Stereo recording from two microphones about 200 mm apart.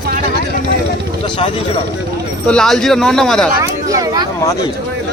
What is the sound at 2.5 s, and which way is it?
Speech, 5° left (ahead or behind).